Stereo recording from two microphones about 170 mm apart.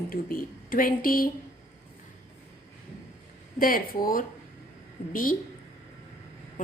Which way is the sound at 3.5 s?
55° left (ahead or behind).